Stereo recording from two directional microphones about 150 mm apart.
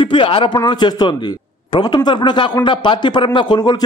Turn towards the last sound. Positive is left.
turn(degrees=30)  # may be behind; listen again after turning